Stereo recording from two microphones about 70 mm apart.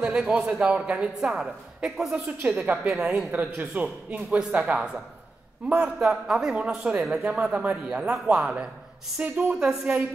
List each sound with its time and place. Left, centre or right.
0.0 s speech: centre
2.1 s speech: right
2.9 s speech: centre
3.3 s speech: right
5.9 s speech: centre